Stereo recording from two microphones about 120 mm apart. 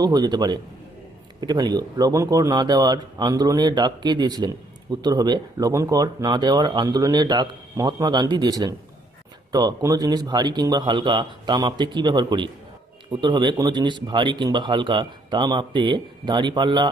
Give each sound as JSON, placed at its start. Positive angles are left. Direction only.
{"t": 0.0, "sound": "speech", "side_deg": -35}